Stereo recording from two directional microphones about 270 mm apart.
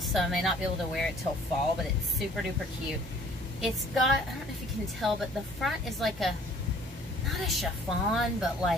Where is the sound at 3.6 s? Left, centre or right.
Centre.